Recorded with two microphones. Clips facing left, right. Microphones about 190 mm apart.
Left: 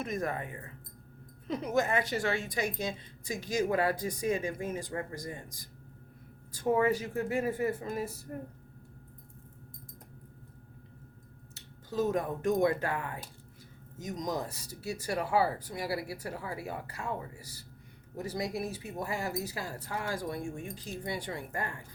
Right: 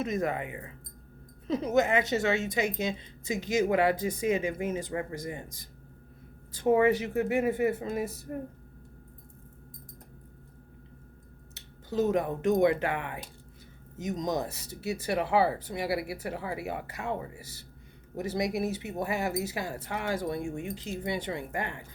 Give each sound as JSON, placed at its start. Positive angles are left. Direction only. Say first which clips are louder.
{"t": 0.0, "sound": "a woman's voice", "louder": "right 4 dB", "side_deg": -20}
{"t": 11.5, "sound": "speech", "louder": "right 3 dB", "side_deg": -20}
{"t": 12.8, "sound": "speech", "louder": "right 3 dB", "side_deg": -90}
{"t": 14.0, "sound": "a woman's voice", "louder": "right 4 dB", "side_deg": -25}